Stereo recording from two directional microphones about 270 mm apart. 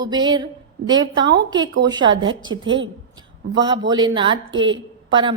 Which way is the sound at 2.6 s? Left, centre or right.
Right.